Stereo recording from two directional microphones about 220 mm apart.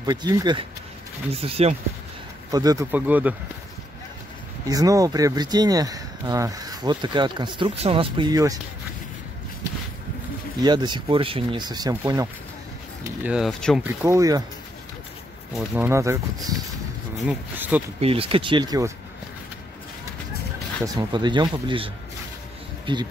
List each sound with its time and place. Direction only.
0.0 s speech: 15° right (ahead or behind)
2.5 s speech: 15° right (ahead or behind)
4.6 s speech: 15° right (ahead or behind)
10.6 s speech: 20° right (ahead or behind)
13.2 s speech: 5° right (ahead or behind)
13.8 s speech: 15° right (ahead or behind)
15.5 s speech: 5° right (ahead or behind)
18.0 s speech: 25° right (ahead or behind)
20.8 s speech: 20° right (ahead or behind)